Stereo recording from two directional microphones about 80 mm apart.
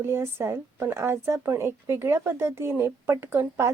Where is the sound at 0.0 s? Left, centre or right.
Right.